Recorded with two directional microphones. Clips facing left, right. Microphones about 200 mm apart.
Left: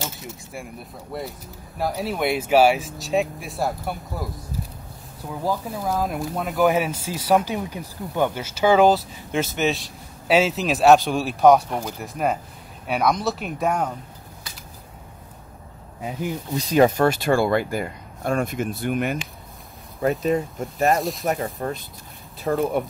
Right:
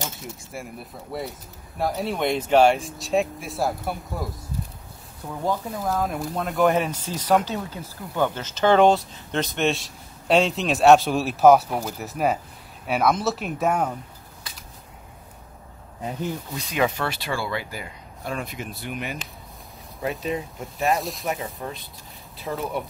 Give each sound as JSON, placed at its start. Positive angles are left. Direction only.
{"t": 0.0, "sound": "speech", "side_deg": 0}
{"t": 5.4, "sound": "speech", "side_deg": 5}
{"t": 16.0, "sound": "speech", "side_deg": 10}
{"t": 16.5, "sound": "speech", "side_deg": 35}
{"t": 20.2, "sound": "speech", "side_deg": 45}
{"t": 20.9, "sound": "speech", "side_deg": 0}
{"t": 21.3, "sound": "speech", "side_deg": 50}